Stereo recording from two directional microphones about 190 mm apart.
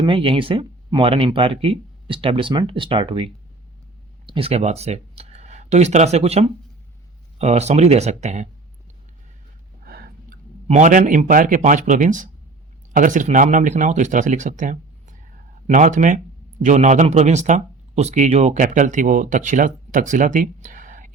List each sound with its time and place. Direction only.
0.0 s speech: 25° right (ahead or behind)
4.3 s speech: 30° right (ahead or behind)
9.8 s a sound: 55° right (ahead or behind)
10.7 s speech: 40° right (ahead or behind)